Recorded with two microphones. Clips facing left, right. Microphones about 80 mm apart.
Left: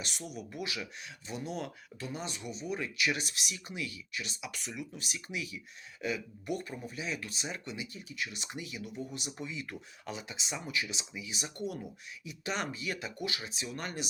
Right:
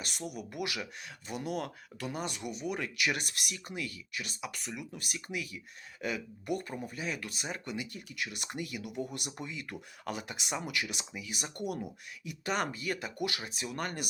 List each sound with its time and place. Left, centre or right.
0.3 s speech: right